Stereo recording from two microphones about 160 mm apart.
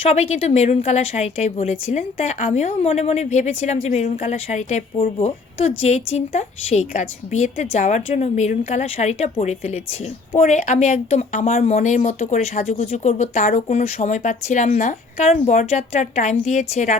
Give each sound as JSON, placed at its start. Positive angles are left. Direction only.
{"t": 0.1, "sound": "a woman's voice", "side_deg": 40}